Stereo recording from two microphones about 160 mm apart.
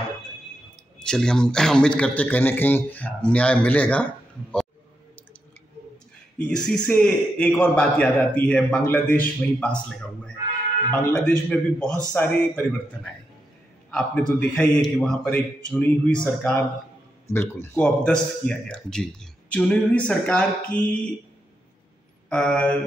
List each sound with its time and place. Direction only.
1.0 s a man's voice: 5° left (ahead or behind)
6.3 s a man's voice: 5° left (ahead or behind)
22.3 s a man's voice: 5° left (ahead or behind)